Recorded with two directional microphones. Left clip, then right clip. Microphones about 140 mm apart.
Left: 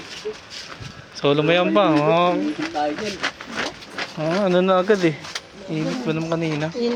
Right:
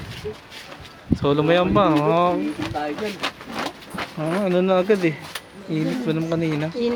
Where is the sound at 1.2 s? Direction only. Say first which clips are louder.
Left 1 dB; 15° right (ahead or behind).